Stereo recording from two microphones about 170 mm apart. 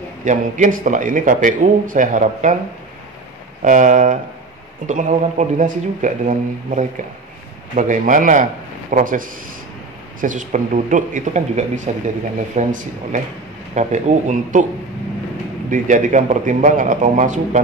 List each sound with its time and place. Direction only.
0.2 s a man's voice: 50° right (ahead or behind)
3.6 s a man's voice: 50° right (ahead or behind)
15.7 s a man's voice: 50° right (ahead or behind)